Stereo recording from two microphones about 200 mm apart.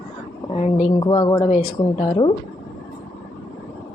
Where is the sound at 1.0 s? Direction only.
20° left (ahead or behind).